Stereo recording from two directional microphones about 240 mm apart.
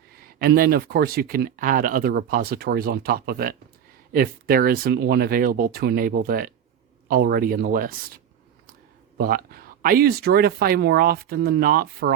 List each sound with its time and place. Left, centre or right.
0.1 s speech: right
9.1 s speech: right